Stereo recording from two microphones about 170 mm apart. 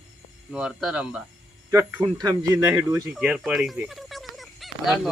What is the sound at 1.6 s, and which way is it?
Speech, 20° right (ahead or behind).